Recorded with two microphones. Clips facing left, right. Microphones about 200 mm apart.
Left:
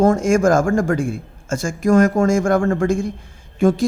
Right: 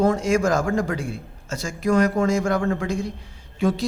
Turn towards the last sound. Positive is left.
turn(degrees=50)  # may be behind; listen again after turning